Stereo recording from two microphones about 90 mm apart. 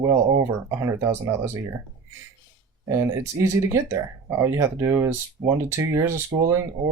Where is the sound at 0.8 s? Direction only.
30° right (ahead or behind).